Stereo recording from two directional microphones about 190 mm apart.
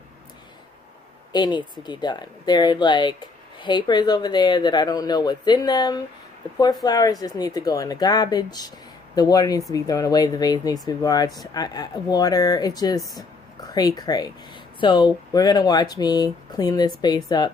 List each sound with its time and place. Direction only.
1.3 s speech: 20° left (ahead or behind)